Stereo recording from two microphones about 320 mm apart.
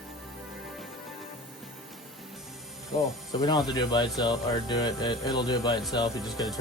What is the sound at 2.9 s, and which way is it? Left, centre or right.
Speech, centre.